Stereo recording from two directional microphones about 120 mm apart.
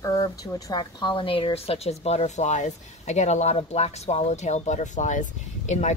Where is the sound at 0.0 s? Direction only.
30° left (ahead or behind).